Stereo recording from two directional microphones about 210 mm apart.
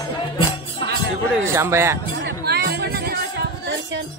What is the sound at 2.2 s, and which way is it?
Music, 50° right (ahead or behind).